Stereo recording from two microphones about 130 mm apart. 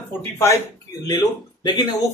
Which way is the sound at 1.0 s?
35° left (ahead or behind).